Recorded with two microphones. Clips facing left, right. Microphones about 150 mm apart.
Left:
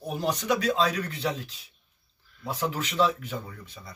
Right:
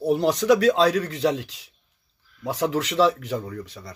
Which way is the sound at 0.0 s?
90° right.